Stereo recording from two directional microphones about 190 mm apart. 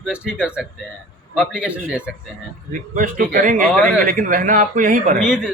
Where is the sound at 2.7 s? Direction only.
45° right (ahead or behind).